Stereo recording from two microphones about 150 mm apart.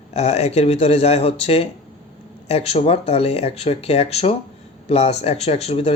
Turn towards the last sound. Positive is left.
turn(degrees=40)  # may be behind; listen again after turning